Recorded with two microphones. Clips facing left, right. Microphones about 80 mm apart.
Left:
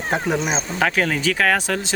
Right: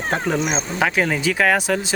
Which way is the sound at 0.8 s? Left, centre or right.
Centre.